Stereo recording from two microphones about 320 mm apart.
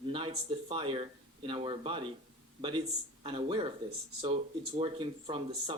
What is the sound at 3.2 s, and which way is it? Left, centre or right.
Speech, centre.